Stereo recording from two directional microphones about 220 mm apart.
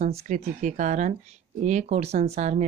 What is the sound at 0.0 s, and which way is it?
Speech, 35° right (ahead or behind).